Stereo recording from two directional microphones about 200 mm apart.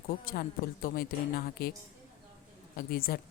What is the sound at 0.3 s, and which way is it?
A woman's voice, 45° left (ahead or behind).